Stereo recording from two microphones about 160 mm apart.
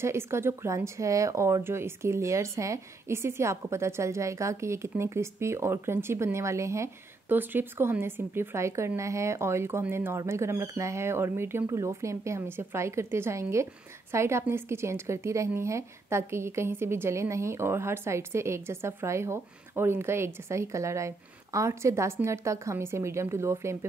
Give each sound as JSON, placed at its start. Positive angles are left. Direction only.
{"t": 0.0, "sound": "speech", "side_deg": -15}